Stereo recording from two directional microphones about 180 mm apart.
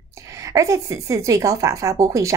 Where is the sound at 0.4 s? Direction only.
15° right (ahead or behind).